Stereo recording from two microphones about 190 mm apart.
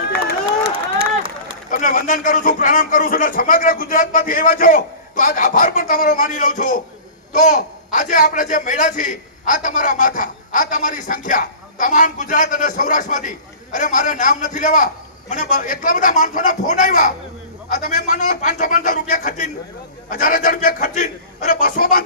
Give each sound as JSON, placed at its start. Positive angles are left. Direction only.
{"t": 1.7, "sound": "a man's voice", "side_deg": 45}